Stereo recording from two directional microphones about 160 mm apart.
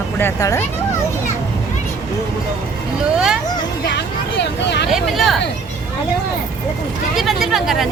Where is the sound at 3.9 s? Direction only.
90° left.